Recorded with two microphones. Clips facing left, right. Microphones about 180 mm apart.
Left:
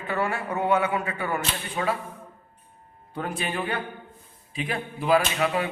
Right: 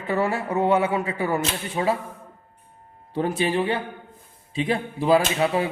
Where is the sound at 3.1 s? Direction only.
25° right (ahead or behind).